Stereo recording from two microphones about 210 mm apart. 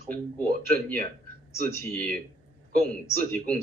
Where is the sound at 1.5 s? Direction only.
5° left (ahead or behind).